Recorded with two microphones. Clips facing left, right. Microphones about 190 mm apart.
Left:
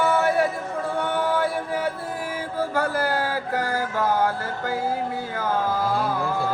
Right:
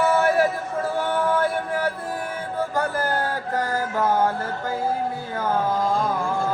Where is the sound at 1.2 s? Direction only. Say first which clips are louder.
Right 2 dB; centre (ahead or behind).